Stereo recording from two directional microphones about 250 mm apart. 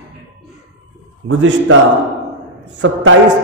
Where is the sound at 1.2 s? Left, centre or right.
Right.